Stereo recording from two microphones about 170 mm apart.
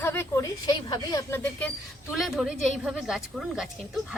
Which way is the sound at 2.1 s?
Centre (ahead or behind).